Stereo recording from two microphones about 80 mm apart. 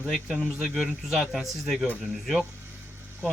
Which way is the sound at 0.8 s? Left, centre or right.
Centre.